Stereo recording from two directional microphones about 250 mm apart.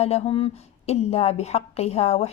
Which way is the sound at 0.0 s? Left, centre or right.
Left.